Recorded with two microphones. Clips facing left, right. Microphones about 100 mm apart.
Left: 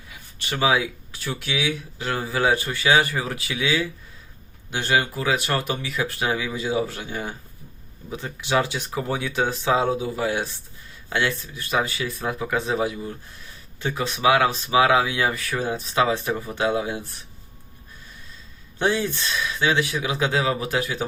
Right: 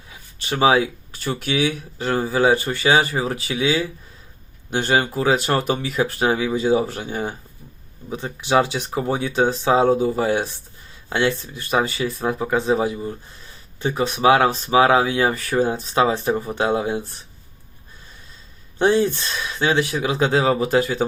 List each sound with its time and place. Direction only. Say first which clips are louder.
0.4 s speech: right 5 dB; 30° right (ahead or behind)
8.1 s speech: right 4 dB; 25° right (ahead or behind)
11.1 s speech: right 4 dB; 25° right (ahead or behind)
18.8 s speech: right 6 dB; 30° right (ahead or behind)